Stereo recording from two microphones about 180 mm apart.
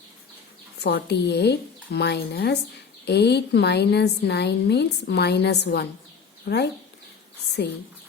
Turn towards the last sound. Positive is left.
turn(degrees=65)  # may be behind; listen again after turning